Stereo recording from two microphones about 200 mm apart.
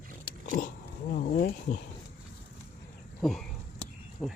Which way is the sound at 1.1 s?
45° left (ahead or behind).